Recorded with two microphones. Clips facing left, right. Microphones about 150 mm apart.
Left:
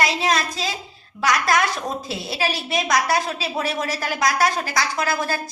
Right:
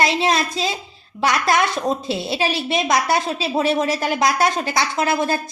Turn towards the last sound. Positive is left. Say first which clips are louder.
# right 4 dB
turn(degrees=-25)  # may be behind; listen again after turning